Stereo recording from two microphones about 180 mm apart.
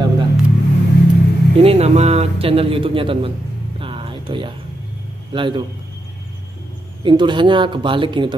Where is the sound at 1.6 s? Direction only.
35° right (ahead or behind).